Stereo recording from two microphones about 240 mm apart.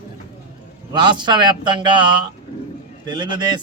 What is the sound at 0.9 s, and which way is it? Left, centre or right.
A man's voice, centre.